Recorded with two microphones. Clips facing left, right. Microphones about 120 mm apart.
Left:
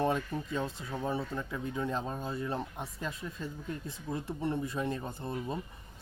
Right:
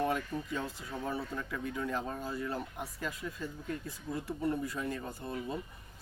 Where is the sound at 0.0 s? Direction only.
25° left (ahead or behind).